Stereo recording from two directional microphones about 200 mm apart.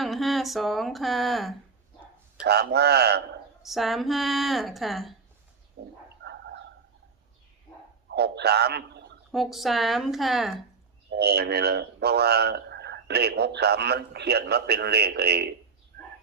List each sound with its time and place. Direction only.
0.0 s speech: centre (ahead or behind)
2.4 s a man's voice: 55° right (ahead or behind)
3.6 s speech: centre (ahead or behind)
5.8 s a sound: 55° right (ahead or behind)
8.1 s a man's voice: 55° right (ahead or behind)
9.3 s speech: centre (ahead or behind)
11.1 s a man's voice: 55° right (ahead or behind)